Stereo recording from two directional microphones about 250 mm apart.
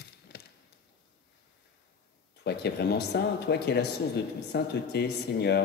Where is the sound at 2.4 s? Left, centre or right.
Left.